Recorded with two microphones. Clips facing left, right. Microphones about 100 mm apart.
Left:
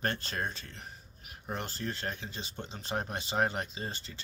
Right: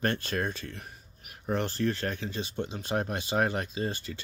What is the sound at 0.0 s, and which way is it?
Speech, 25° left (ahead or behind).